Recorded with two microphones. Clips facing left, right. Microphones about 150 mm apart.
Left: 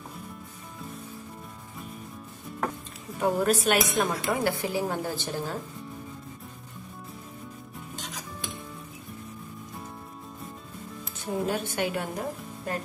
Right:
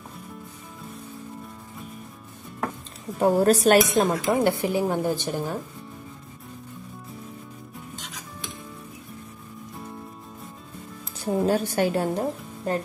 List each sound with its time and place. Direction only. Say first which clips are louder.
3.2 s a woman's voice: right 6 dB; 35° right (ahead or behind); by 5.6 s 15° right (ahead or behind)
11.1 s speech: right 6 dB; 40° right (ahead or behind)